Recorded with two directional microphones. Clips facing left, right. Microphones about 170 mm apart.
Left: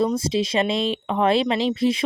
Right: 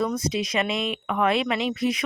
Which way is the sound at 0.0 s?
30° left (ahead or behind).